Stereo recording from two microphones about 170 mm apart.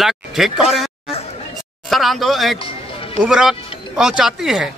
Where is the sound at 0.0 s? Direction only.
Centre (ahead or behind).